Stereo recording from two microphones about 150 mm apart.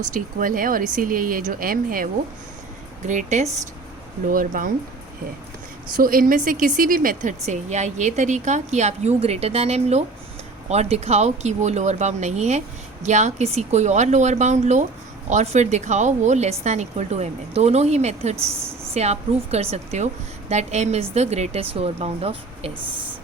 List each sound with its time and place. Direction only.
0.1 s speech: 65° right (ahead or behind)
3.1 s speech: 55° right (ahead or behind)
4.3 s speech: 65° right (ahead or behind)
6.0 s speech: 70° right (ahead or behind); by 22.7 s 40° right (ahead or behind)